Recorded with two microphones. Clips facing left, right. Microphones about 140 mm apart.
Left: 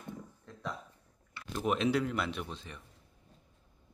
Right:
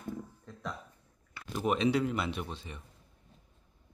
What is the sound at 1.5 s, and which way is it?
Speech, centre (ahead or behind).